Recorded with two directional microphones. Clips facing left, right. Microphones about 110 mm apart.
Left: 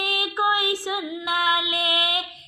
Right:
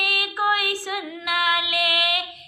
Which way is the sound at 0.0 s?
25° left (ahead or behind).